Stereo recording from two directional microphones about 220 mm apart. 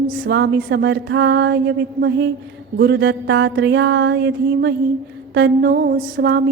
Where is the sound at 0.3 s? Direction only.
50° right (ahead or behind).